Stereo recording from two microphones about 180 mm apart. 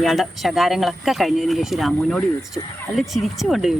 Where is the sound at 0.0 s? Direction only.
Centre (ahead or behind).